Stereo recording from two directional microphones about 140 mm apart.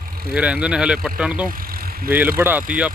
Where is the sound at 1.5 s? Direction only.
90° right.